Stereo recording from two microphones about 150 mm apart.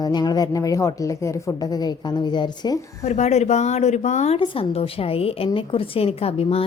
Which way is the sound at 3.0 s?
50° left (ahead or behind).